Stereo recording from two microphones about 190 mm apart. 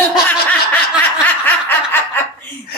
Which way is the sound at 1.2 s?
10° left (ahead or behind).